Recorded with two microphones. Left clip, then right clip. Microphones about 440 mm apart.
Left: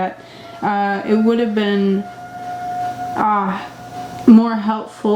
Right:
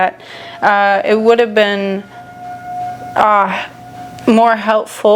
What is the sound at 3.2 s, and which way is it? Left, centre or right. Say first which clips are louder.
Speech: right 7 dB; right.